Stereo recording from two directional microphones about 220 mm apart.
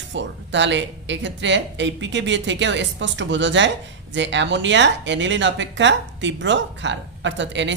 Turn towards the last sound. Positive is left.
turn(degrees=-55)  # may be behind; listen again after turning